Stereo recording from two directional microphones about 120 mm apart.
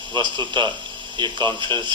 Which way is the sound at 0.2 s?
40° right (ahead or behind).